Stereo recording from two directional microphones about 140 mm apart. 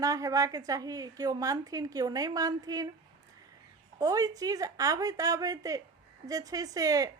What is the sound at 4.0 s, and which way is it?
Speech, 25° right (ahead or behind).